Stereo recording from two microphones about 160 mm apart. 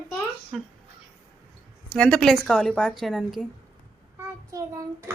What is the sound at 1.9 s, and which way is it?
A woman's voice, 5° left (ahead or behind).